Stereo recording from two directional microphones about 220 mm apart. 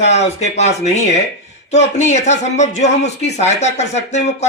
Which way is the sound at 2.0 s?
30° left (ahead or behind).